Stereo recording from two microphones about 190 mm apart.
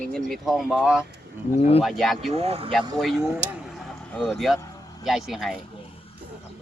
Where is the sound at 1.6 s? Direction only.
30° left (ahead or behind).